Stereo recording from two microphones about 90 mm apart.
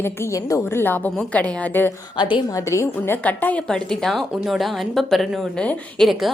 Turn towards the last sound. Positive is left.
turn(degrees=0)  # may be behind; listen again after turning